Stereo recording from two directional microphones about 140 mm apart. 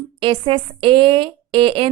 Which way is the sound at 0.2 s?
40° right (ahead or behind).